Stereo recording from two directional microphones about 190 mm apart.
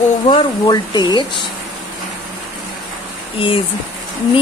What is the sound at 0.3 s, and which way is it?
Speech, 25° left (ahead or behind).